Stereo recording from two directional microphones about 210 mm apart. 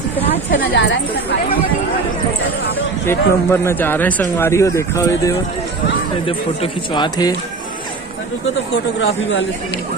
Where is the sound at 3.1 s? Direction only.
10° left (ahead or behind).